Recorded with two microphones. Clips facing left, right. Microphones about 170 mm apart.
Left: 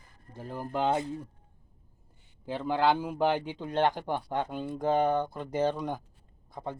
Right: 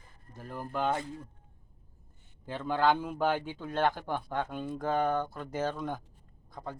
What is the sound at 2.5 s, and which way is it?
A man's voice, 10° left (ahead or behind).